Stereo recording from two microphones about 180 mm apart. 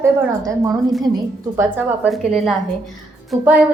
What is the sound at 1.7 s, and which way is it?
A woman's voice, 10° right (ahead or behind).